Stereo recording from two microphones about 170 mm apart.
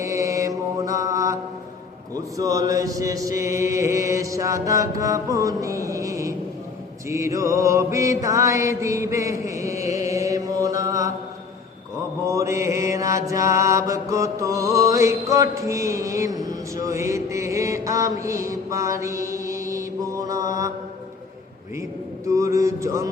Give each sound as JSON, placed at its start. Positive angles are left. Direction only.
{"t": 0.0, "sound": "mantra", "side_deg": -20}
{"t": 2.1, "sound": "chant", "side_deg": -20}
{"t": 7.1, "sound": "mantra", "side_deg": -15}
{"t": 12.2, "sound": "mantra", "side_deg": -15}
{"t": 22.3, "sound": "mantra", "side_deg": -15}